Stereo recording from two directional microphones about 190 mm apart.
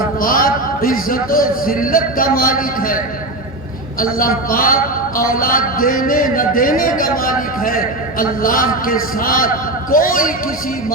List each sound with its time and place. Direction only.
0.2 s speech: 50° left (ahead or behind)
4.0 s a man's voice: 50° left (ahead or behind)